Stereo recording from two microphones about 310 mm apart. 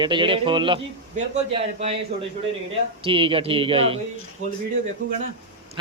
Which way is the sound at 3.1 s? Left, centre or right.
Centre.